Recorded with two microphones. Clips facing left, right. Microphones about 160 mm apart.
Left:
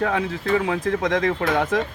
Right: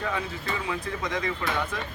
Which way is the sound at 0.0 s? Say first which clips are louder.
Left 8 dB; 75° left (ahead or behind).